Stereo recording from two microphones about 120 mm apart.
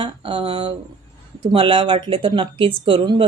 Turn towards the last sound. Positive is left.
turn(degrees=-45)  # may be behind; listen again after turning